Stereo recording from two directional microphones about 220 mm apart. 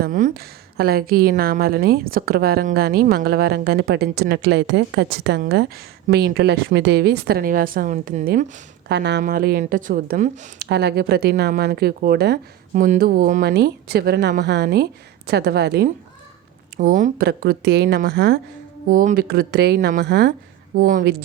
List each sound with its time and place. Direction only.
0.0 s a woman's voice: 40° right (ahead or behind)
8.9 s a woman's voice: 50° right (ahead or behind); by 10.5 s 35° right (ahead or behind)
10.6 s a woman's voice: 50° right (ahead or behind)
18.9 s a woman's voice: 40° right (ahead or behind)
20.7 s a woman's voice: 40° right (ahead or behind)